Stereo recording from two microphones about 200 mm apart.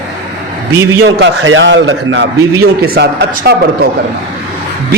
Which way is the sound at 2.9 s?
50° right (ahead or behind).